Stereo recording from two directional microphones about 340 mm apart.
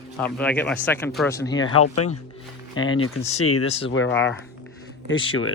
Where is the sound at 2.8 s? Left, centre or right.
Left.